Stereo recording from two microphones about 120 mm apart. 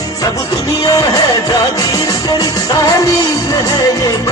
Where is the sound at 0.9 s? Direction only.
30° left (ahead or behind).